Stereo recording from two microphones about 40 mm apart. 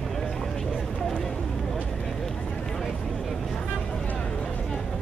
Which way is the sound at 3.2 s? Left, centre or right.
Centre.